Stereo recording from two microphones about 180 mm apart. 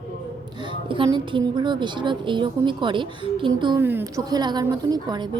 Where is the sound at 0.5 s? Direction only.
25° right (ahead or behind).